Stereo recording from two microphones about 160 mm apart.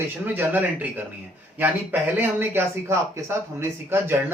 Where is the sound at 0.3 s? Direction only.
10° right (ahead or behind).